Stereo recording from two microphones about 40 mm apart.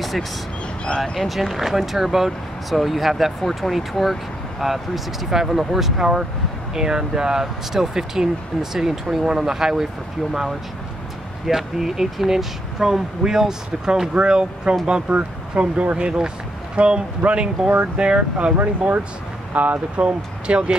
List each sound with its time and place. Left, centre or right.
0.8 s speech: left
1.1 s speech: centre
11.4 s speech: centre; by 18.5 s right
18.6 s speech: right
19.6 s speech: right